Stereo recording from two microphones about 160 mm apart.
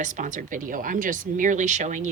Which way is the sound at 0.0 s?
50° right (ahead or behind).